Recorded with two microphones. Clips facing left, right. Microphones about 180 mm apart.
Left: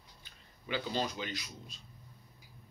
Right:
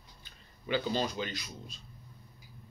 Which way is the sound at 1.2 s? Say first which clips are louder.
Right 2 dB; 15° left (ahead or behind).